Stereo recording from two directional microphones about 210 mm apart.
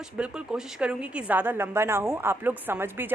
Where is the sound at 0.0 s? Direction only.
5° right (ahead or behind).